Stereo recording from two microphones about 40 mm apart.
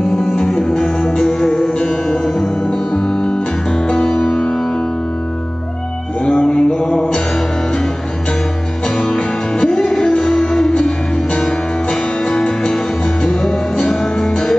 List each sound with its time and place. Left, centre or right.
0.7 s music: left
0.9 s music: centre
2.0 s music: centre
3.2 s music: left
6.2 s mantra: left
9.0 s music: centre
9.6 s music: left